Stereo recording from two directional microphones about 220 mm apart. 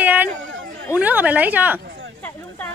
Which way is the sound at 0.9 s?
5° right (ahead or behind).